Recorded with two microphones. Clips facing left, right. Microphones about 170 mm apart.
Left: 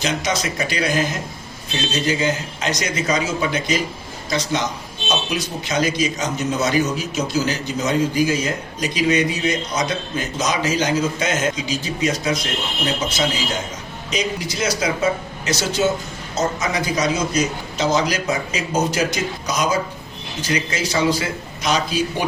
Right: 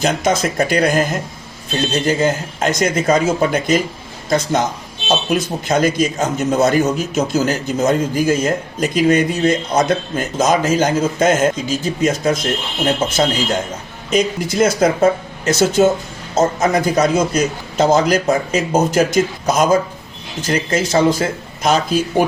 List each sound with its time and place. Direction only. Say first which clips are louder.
0.0 s speech: right 6 dB; 50° right (ahead or behind)